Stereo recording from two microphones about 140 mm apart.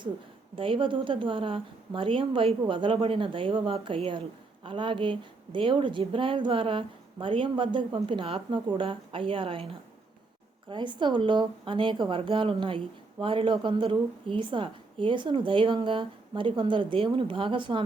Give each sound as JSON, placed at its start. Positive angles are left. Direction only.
{"t": 0.5, "sound": "a woman's voice", "side_deg": -40}
{"t": 10.7, "sound": "a woman's voice", "side_deg": -35}